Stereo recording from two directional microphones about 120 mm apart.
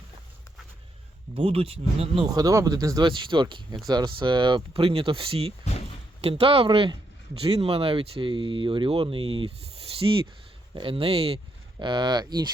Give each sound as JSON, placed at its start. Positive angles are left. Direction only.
{"t": 1.4, "sound": "speech", "side_deg": -55}
{"t": 2.3, "sound": "speech", "side_deg": -30}
{"t": 3.1, "sound": "speech", "side_deg": -45}
{"t": 11.8, "sound": "speech", "side_deg": -40}